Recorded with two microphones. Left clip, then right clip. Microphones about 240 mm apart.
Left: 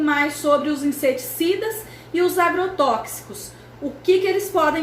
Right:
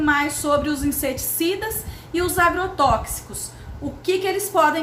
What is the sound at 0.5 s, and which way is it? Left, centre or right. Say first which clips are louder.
A woman's voice: right 1 dB; centre.